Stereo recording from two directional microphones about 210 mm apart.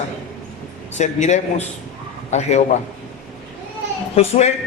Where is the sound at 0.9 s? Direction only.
35° left (ahead or behind).